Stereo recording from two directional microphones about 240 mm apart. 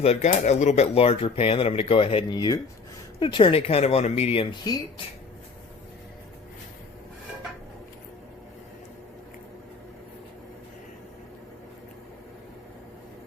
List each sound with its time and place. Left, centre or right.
0.0 s speech: left